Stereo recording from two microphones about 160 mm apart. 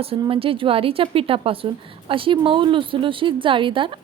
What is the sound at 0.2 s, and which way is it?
A woman's voice, 35° right (ahead or behind).